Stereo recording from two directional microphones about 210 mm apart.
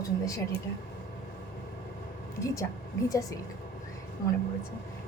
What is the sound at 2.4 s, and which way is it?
Speech, 15° left (ahead or behind).